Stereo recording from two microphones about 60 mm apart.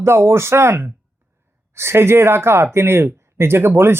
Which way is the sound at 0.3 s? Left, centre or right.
Right.